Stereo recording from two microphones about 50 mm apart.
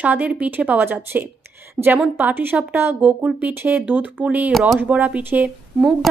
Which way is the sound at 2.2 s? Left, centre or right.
Right.